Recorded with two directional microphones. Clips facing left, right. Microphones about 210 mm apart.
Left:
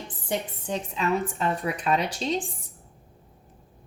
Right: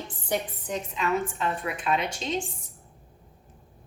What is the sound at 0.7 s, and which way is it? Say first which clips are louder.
A woman's voice: left 1 dB; 35° left (ahead or behind).